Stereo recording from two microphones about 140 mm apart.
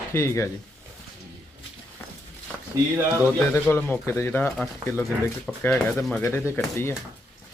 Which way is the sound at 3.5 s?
15° left (ahead or behind).